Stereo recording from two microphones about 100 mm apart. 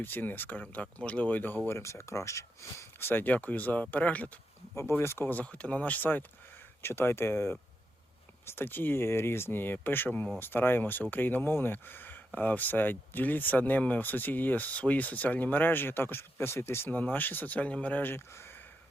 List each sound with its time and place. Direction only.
0.0 s speech: 20° left (ahead or behind)
4.7 s speech: 25° left (ahead or behind)